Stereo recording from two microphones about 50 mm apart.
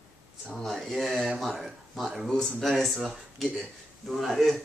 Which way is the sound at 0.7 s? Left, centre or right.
Centre.